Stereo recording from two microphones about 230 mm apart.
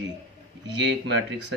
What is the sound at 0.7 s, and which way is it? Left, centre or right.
Speech, right.